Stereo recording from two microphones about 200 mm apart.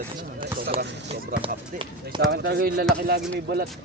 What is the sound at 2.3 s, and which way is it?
Speech, 50° right (ahead or behind).